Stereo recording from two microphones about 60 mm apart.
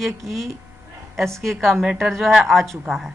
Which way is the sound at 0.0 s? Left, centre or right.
Centre.